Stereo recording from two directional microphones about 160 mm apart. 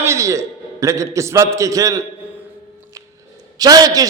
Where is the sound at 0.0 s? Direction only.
20° right (ahead or behind).